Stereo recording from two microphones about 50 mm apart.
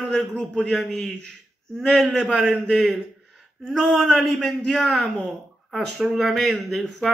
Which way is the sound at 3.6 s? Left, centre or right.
Centre.